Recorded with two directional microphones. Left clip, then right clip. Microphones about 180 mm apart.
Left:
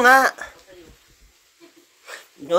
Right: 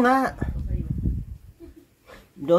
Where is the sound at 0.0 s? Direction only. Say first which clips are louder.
Left 7 dB; 10° left (ahead or behind).